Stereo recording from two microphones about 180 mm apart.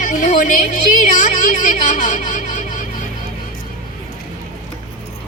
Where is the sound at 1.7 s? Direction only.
45° left (ahead or behind).